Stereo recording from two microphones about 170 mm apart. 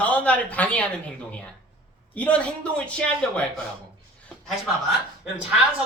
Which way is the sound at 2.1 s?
10° left (ahead or behind).